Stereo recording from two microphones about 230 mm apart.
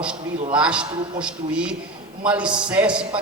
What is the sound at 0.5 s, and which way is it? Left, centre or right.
Speech, centre.